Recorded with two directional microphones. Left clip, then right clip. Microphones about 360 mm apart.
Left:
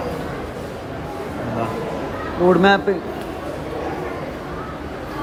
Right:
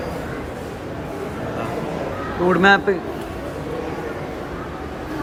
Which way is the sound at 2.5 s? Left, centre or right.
Centre.